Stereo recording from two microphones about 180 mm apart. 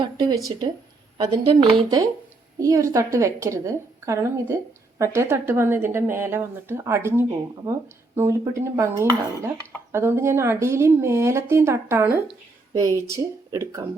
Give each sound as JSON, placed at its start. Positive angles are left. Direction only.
{"t": 0.0, "sound": "speech", "side_deg": -25}